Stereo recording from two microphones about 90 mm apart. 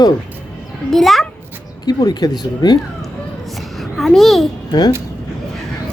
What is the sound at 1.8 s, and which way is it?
Speech, 50° left (ahead or behind).